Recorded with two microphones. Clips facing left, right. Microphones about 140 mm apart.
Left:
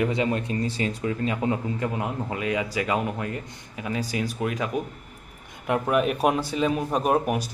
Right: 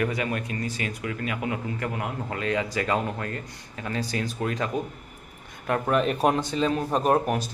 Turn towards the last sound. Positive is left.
turn(degrees=10)  # may be behind; listen again after turning